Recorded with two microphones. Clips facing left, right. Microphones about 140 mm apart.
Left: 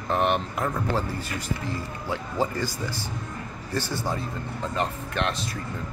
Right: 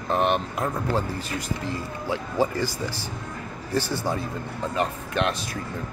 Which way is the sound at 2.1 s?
10° right (ahead or behind).